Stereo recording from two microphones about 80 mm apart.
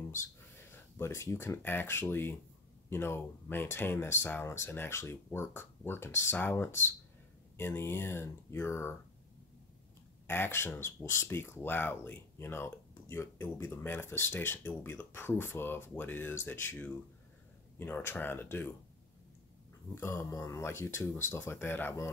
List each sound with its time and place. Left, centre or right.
0.1 s speech: left
10.2 s speech: left
17.7 s speech: left
20.0 s speech: left